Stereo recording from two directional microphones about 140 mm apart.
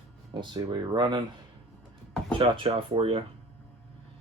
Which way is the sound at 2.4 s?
40° right (ahead or behind).